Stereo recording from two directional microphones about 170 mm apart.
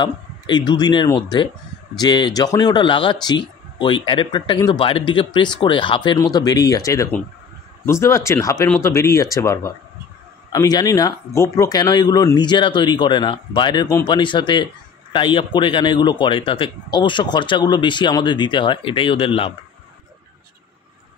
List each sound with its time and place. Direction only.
0.0 s speech: 25° left (ahead or behind)